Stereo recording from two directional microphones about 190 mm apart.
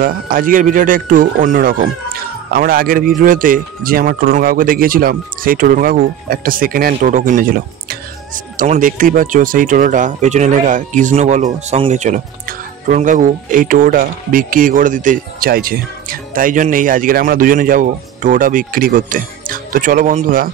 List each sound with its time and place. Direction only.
0.0 s speech: 45° right (ahead or behind)